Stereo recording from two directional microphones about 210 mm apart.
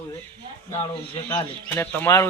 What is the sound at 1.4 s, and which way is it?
Speech, 10° left (ahead or behind).